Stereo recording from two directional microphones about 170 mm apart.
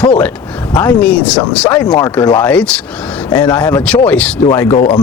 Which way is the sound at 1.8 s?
25° left (ahead or behind).